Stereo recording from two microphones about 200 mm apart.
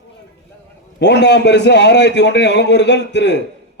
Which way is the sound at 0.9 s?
60° left (ahead or behind).